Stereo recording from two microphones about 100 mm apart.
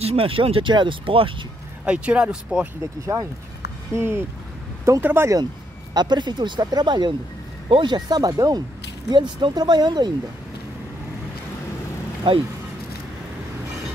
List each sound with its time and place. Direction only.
0.0 s speech: 75° right (ahead or behind); by 1.3 s 60° right (ahead or behind)
1.9 s speech: 10° right (ahead or behind)
3.1 s speech: 30° right (ahead or behind)
5.9 s speech: 45° right (ahead or behind)
12.2 s speech: 55° right (ahead or behind)